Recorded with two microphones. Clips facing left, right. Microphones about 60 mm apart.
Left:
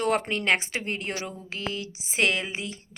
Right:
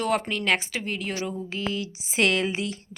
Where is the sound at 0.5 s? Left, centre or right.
Left.